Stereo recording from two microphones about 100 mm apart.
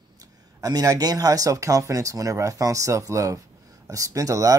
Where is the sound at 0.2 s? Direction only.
40° right (ahead or behind).